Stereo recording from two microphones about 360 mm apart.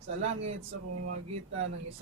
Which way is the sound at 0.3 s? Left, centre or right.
Right.